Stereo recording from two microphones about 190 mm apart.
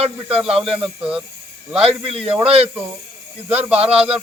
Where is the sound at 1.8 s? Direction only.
30° right (ahead or behind).